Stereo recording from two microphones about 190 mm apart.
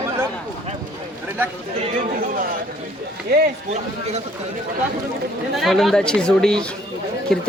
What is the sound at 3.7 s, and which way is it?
Speech, 35° right (ahead or behind).